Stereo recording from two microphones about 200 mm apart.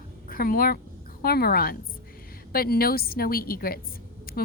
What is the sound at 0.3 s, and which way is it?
A woman's voice, 45° left (ahead or behind).